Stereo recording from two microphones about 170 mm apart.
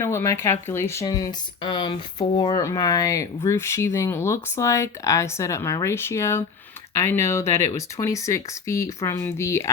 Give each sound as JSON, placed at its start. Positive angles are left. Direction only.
{"t": 0.0, "sound": "speech", "side_deg": 15}